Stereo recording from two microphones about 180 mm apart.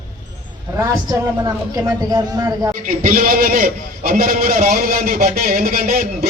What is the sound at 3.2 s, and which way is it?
A man's voice, 50° right (ahead or behind).